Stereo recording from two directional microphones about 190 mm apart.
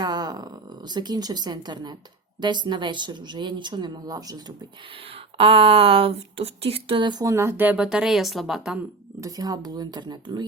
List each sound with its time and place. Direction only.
0.0 s speech: 20° right (ahead or behind); by 8.8 s centre (ahead or behind)
9.2 s speech: 20° right (ahead or behind)